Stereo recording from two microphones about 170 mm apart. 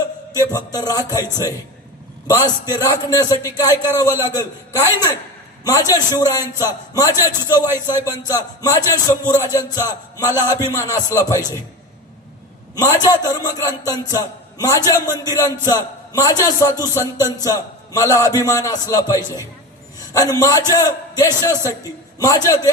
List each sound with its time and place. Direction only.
0.3 s a man's voice: 20° left (ahead or behind)
2.2 s a man's voice: 20° left (ahead or behind)
12.7 s a man's voice: 20° left (ahead or behind)